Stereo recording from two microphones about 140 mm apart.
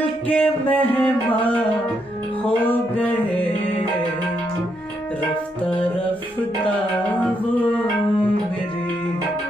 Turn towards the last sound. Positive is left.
turn(degrees=10)  # may be behind; listen again after turning